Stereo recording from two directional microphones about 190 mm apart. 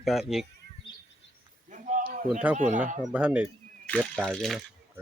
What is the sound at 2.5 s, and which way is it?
Speech, 40° right (ahead or behind).